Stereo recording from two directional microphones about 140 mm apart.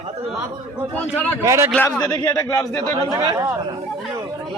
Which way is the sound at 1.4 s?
20° right (ahead or behind).